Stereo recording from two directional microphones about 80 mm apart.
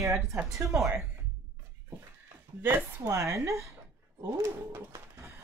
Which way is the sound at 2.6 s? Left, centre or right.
Right.